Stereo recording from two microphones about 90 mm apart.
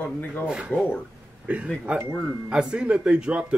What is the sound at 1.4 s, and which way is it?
Speech, 15° right (ahead or behind).